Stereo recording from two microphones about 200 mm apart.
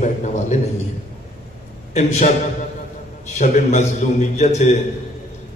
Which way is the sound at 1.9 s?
35° left (ahead or behind).